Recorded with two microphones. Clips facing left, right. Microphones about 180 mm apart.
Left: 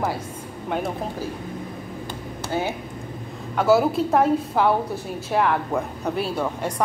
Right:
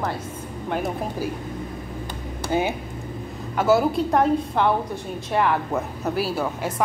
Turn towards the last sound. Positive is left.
turn(degrees=-5)  # may be behind; listen again after turning